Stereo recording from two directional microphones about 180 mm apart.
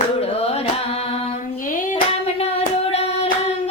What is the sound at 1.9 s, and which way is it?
Hands, 35° left (ahead or behind).